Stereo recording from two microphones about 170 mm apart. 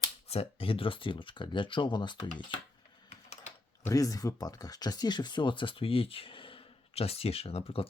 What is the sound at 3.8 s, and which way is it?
Speech, 20° left (ahead or behind).